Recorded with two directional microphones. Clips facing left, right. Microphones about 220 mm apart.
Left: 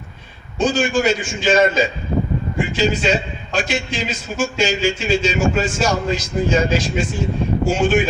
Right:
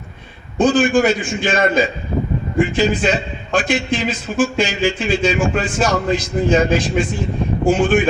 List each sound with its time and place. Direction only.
0.6 s a man's voice: 55° right (ahead or behind)